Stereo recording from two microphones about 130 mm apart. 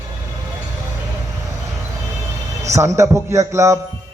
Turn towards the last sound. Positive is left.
turn(degrees=-20)  # may be behind; listen again after turning